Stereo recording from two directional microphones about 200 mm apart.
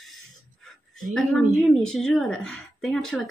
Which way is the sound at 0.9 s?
Centre (ahead or behind).